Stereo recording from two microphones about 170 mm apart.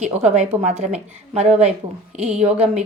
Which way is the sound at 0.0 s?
40° right (ahead or behind).